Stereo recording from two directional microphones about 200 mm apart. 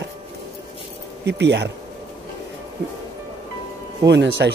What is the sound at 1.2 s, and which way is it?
Speech, 55° right (ahead or behind).